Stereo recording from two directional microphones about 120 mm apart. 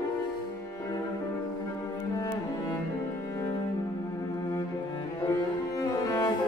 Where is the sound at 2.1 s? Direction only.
30° left (ahead or behind).